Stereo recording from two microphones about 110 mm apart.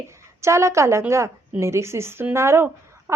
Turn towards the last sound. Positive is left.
turn(degrees=-20)  # may be behind; listen again after turning